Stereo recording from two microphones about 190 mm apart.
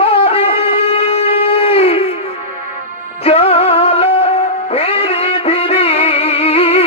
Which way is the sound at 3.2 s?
30° left (ahead or behind).